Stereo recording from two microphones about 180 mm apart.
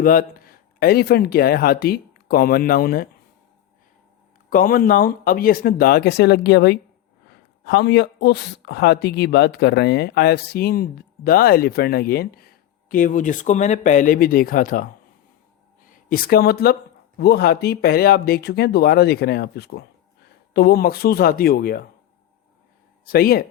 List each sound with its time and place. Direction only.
0.0 s speech: 50° left (ahead or behind)
4.4 s speech: 50° left (ahead or behind)
23.0 s speech: 55° left (ahead or behind)